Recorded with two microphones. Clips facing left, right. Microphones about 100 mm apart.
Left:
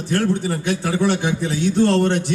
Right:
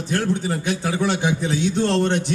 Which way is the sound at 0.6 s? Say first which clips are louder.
Left 3 dB; 20° right (ahead or behind).